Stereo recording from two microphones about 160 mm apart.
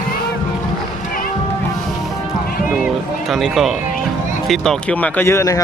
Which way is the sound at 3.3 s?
Centre (ahead or behind).